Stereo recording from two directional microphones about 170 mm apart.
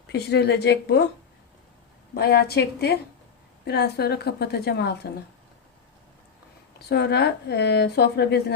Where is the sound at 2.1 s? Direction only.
70° left (ahead or behind).